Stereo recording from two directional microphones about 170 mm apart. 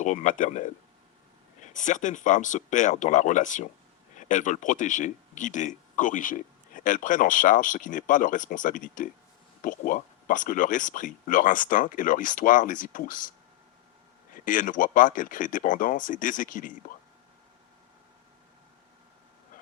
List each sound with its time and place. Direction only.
0.0 s speech: 45° left (ahead or behind)
14.3 s speech: 50° left (ahead or behind)